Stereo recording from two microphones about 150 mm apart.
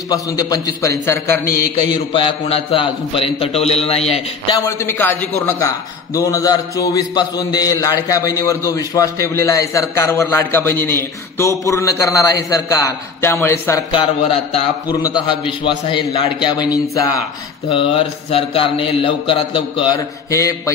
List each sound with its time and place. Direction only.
0.1 s a man's voice: 25° left (ahead or behind)
2.1 s a man's voice: 40° left (ahead or behind)
4.6 s a man's voice: 15° left (ahead or behind)
13.9 s a man's voice: 45° left (ahead or behind)
14.9 s a man's voice: 25° left (ahead or behind)
17.6 s a man's voice: 40° left (ahead or behind)
20.0 s a man's voice: 20° left (ahead or behind)